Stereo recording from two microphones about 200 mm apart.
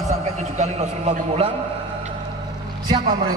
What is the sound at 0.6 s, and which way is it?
Speech, 35° right (ahead or behind).